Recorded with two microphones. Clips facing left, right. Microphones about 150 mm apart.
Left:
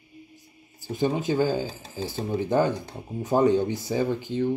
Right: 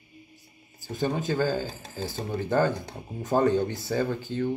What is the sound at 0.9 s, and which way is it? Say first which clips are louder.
A man's voice: left 3 dB; 15° left (ahead or behind).